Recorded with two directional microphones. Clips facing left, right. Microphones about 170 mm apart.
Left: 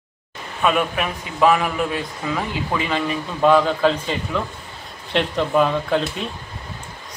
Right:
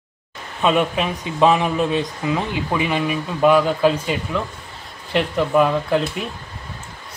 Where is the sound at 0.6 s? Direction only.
25° right (ahead or behind).